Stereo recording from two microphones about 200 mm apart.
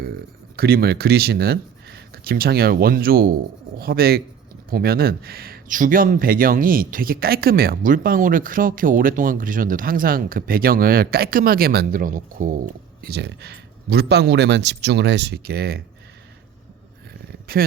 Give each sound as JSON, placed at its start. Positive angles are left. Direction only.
{"t": 0.5, "sound": "speech", "side_deg": -50}
{"t": 17.5, "sound": "speech", "side_deg": -50}